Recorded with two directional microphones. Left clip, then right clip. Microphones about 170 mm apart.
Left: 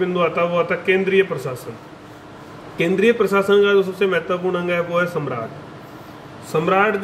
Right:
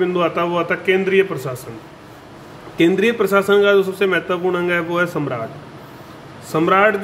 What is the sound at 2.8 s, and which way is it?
A man's voice, 35° right (ahead or behind).